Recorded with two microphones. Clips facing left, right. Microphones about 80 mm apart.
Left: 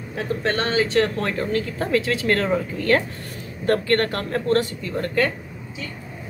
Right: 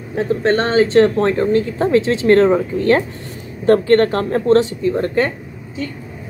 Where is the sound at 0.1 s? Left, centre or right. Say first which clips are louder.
Right 8 dB; right.